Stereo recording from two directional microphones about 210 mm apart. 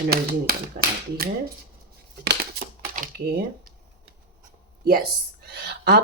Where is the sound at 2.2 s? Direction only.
50° right (ahead or behind).